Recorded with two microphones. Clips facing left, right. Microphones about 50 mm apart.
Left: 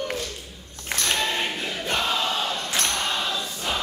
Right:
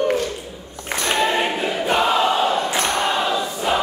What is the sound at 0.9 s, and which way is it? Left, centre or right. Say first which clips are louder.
Choir: right 6 dB; centre.